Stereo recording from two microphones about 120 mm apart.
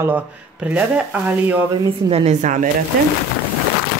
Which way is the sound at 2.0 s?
60° right (ahead or behind).